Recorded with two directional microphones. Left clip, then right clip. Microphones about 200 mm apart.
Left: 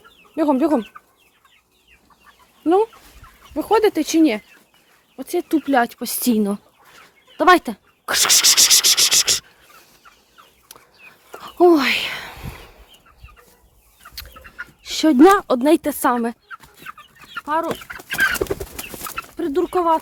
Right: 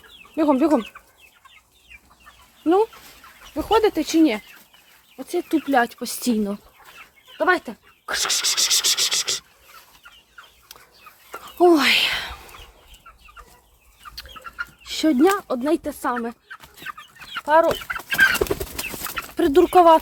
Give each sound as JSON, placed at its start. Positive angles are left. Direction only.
{"t": 0.3, "sound": "speech", "side_deg": 25}
{"t": 2.6, "sound": "speech", "side_deg": 20}
{"t": 7.3, "sound": "a sound", "side_deg": 45}
{"t": 10.7, "sound": "chicken", "side_deg": 20}
{"t": 11.5, "sound": "a sound", "side_deg": 20}
{"t": 14.8, "sound": "speech", "side_deg": 25}
{"t": 17.4, "sound": "speech", "side_deg": -5}
{"t": 18.8, "sound": "chicken", "side_deg": 15}
{"t": 19.4, "sound": "speech", "side_deg": -25}
{"t": 19.6, "sound": "speech", "side_deg": -5}